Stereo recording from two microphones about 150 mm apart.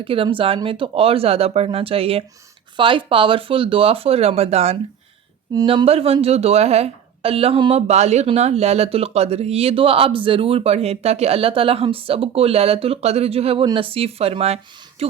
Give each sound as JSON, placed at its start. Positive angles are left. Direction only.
{"t": 0.0, "sound": "speech", "side_deg": -35}